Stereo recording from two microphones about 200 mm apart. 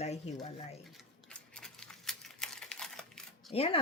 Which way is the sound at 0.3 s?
30° left (ahead or behind).